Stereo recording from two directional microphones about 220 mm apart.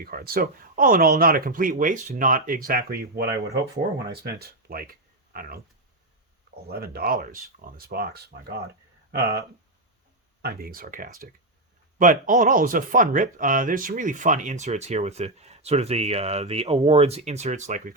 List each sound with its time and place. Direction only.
0.0 s speech: 40° right (ahead or behind)
6.7 s speech: 45° right (ahead or behind)
10.4 s speech: 40° right (ahead or behind)